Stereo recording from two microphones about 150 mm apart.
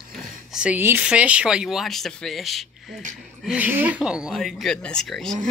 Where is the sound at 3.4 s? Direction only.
10° right (ahead or behind).